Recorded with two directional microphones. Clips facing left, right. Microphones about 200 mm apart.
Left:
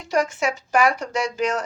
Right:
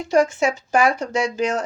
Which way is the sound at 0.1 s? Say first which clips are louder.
Right 4 dB; 25° right (ahead or behind).